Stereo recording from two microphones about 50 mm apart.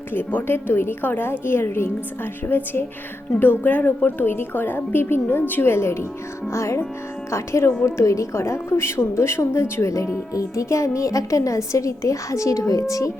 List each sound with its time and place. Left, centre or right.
0.4 s a woman's voice: left
5.6 s speech: left
6.5 s speech: left
7.9 s a woman's voice: left